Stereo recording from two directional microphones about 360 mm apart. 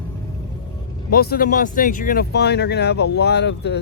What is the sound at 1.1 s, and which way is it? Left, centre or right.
Speech, left.